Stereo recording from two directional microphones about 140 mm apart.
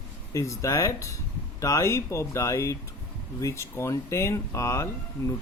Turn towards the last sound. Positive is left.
turn(degrees=20)  # may be behind; listen again after turning